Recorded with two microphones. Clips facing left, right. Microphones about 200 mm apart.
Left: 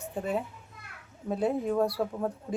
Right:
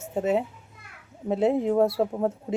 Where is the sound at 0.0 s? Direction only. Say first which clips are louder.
Right 7 dB; 25° right (ahead or behind).